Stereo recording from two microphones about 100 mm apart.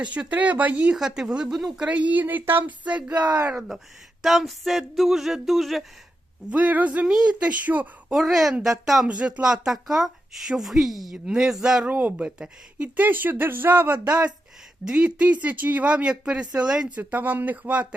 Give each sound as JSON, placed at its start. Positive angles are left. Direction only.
{"t": 0.0, "sound": "speech", "side_deg": -15}
{"t": 0.9, "sound": "speech", "side_deg": -5}
{"t": 3.5, "sound": "a sound", "side_deg": -5}
{"t": 6.5, "sound": "speech", "side_deg": -15}
{"t": 8.1, "sound": "a sound", "side_deg": 0}
{"t": 8.6, "sound": "speech", "side_deg": 0}